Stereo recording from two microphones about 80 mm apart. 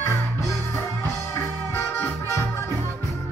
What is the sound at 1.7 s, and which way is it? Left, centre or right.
Music, left.